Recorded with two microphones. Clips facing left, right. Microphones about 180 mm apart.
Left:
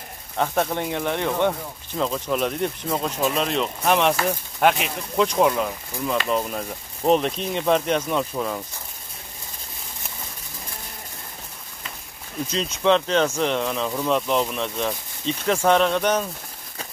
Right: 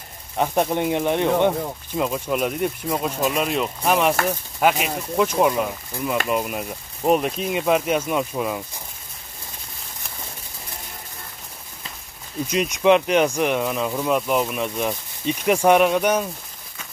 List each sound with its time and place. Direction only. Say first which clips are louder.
0.4 s speech: right 2 dB; 15° right (ahead or behind)
12.4 s speech: right 3 dB; 15° right (ahead or behind)